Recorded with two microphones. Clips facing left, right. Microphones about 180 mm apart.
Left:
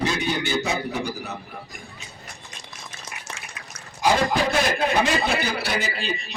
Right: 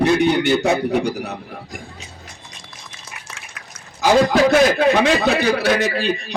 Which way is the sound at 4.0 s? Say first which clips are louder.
Right 7 dB; 90° right.